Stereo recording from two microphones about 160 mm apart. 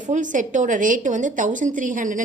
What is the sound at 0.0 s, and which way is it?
A woman's voice, 50° right (ahead or behind).